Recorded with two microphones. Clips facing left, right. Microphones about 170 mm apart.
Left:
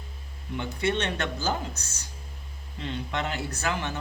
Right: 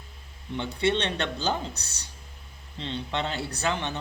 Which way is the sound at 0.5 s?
25° right (ahead or behind).